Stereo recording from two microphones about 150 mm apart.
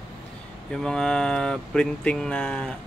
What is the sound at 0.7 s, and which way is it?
Speech, 5° left (ahead or behind).